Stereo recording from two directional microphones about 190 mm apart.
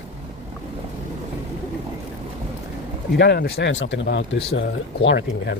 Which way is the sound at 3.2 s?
60° left (ahead or behind).